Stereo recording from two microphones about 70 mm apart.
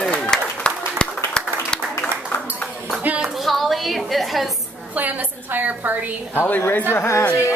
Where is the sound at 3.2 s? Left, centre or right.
Centre.